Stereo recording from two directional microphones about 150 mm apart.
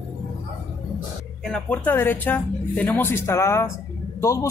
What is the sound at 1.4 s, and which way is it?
Speech, 5° left (ahead or behind).